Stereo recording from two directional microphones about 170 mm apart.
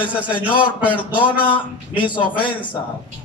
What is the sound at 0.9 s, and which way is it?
A man's voice, 30° left (ahead or behind).